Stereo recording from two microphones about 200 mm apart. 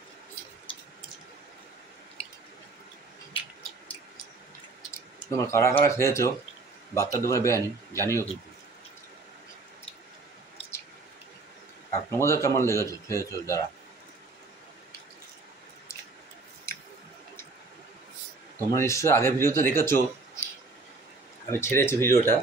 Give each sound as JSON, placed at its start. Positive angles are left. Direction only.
{"t": 5.3, "sound": "a man's voice", "side_deg": 15}
{"t": 12.1, "sound": "speech", "side_deg": 15}
{"t": 16.7, "sound": "squish", "side_deg": 15}
{"t": 18.7, "sound": "speech", "side_deg": 15}
{"t": 21.5, "sound": "speech", "side_deg": 10}